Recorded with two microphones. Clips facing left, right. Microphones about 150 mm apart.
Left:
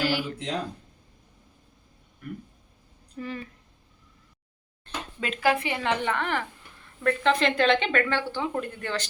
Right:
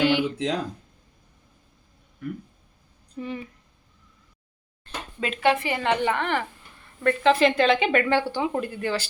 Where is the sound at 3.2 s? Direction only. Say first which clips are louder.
Right 2 dB; 20° right (ahead or behind).